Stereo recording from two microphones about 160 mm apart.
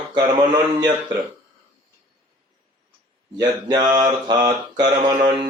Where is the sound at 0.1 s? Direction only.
25° right (ahead or behind).